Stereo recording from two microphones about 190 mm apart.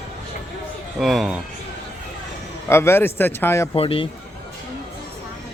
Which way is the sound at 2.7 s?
15° left (ahead or behind).